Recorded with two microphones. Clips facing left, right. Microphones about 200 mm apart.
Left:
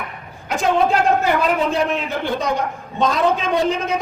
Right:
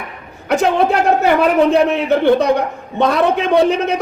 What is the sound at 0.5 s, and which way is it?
A man's voice, 65° right (ahead or behind).